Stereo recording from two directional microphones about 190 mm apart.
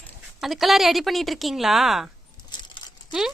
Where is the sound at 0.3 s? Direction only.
Centre (ahead or behind).